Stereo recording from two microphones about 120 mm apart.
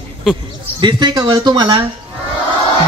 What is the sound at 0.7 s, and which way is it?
Speech, 40° right (ahead or behind).